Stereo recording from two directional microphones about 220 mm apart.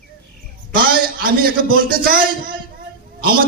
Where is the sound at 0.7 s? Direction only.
40° right (ahead or behind).